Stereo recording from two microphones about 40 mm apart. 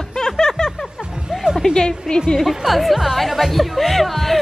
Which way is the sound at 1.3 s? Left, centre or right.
Centre.